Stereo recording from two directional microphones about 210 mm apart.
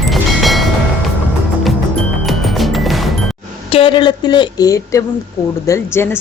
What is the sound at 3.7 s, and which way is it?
A woman's voice, 25° left (ahead or behind).